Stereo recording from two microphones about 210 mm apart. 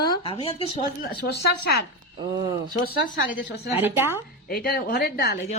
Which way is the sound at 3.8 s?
10° right (ahead or behind).